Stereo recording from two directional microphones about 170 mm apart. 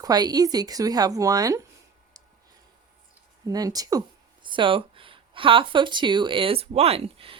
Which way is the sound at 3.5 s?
20° right (ahead or behind).